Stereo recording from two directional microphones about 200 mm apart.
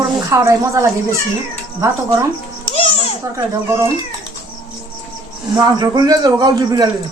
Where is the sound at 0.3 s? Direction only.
15° right (ahead or behind).